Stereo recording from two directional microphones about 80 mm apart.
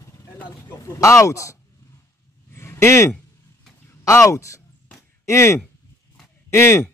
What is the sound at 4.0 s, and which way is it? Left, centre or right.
Speech, left.